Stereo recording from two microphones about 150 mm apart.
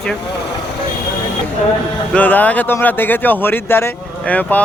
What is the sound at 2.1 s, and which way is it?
Speech, 10° left (ahead or behind).